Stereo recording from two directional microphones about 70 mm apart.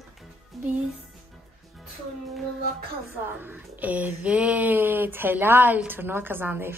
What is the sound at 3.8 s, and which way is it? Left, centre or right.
Speech, right.